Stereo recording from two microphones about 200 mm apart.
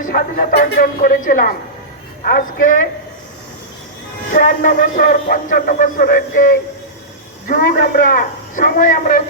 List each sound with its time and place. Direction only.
0.0 s a man's voice: 45° left (ahead or behind)
4.3 s a man's voice: 40° left (ahead or behind)